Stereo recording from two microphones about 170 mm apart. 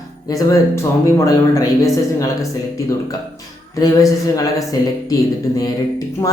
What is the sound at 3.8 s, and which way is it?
Speech, 20° left (ahead or behind).